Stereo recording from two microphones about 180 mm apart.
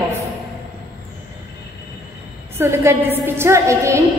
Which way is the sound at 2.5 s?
15° right (ahead or behind).